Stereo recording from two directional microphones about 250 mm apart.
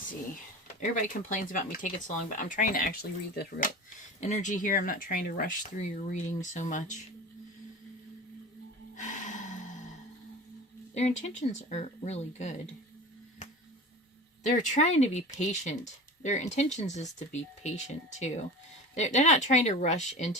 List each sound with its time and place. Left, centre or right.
0.8 s speech: left
9.0 s gasp: left
10.9 s speech: left
14.4 s speech: left